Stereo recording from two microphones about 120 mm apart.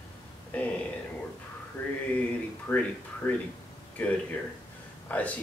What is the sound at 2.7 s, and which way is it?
Speech, 15° left (ahead or behind).